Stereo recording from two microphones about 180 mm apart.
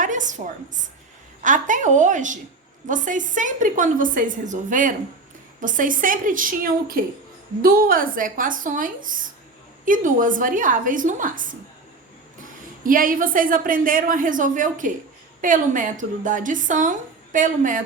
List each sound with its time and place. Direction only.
0.0 s a sound: 45° right (ahead or behind)
1.4 s a woman's voice: 45° right (ahead or behind)
12.8 s a woman's voice: 50° right (ahead or behind)